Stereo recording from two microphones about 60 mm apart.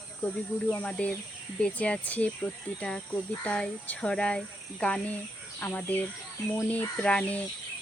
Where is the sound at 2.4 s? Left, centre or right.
Centre.